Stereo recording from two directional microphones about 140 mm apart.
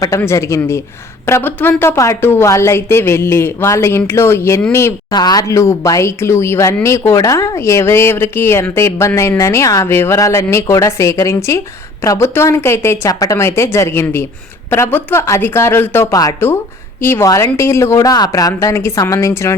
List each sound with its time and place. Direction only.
0.2 s a woman's voice: 20° left (ahead or behind)
5.1 s a woman's voice: 30° left (ahead or behind)